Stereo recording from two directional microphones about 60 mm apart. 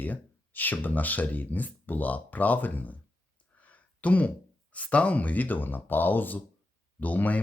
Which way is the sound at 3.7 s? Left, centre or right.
Left.